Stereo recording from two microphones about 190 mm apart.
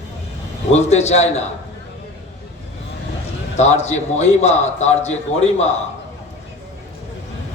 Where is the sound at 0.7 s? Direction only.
35° left (ahead or behind).